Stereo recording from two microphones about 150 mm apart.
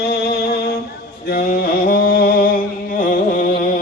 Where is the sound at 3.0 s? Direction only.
65° left (ahead or behind).